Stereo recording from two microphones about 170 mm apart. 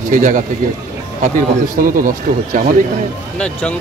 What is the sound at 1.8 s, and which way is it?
Speech, 55° right (ahead or behind).